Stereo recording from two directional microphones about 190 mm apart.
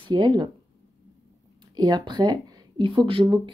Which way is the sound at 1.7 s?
20° right (ahead or behind).